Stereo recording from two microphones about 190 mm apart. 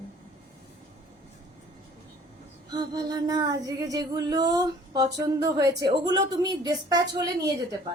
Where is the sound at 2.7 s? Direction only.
20° right (ahead or behind).